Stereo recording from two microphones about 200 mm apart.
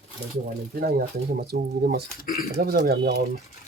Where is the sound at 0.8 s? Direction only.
50° right (ahead or behind).